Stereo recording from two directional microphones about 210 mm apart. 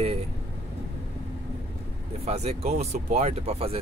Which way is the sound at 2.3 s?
30° right (ahead or behind).